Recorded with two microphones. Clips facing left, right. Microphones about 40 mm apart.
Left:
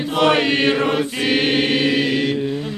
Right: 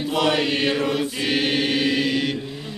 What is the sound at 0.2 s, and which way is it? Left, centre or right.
Chant, left.